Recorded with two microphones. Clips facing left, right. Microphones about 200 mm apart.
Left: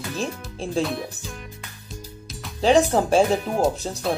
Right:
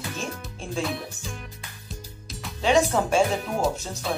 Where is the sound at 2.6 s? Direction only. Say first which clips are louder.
Left 4 dB; 35° left (ahead or behind).